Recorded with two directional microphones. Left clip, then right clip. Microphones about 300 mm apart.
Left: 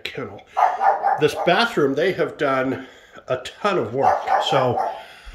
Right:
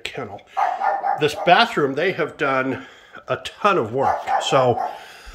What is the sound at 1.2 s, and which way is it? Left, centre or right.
Speech, centre.